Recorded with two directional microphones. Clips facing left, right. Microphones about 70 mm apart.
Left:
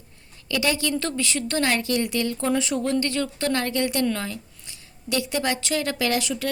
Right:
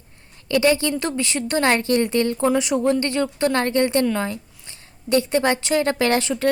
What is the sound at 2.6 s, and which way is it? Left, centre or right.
A woman's voice, right.